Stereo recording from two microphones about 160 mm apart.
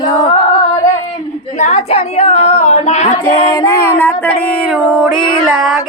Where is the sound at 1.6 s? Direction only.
45° left (ahead or behind).